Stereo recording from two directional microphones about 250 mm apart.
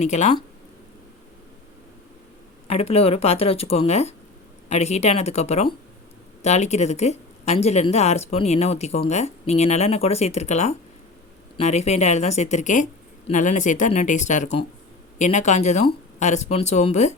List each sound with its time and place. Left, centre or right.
0.0 s speech: left
2.6 s speech: left